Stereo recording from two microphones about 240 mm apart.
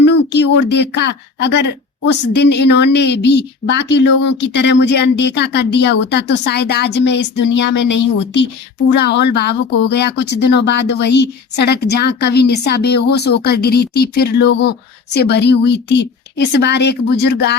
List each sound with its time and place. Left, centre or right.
0.1 s a woman's voice: left